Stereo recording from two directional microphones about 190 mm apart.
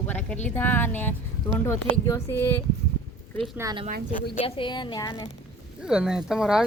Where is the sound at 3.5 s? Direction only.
15° right (ahead or behind).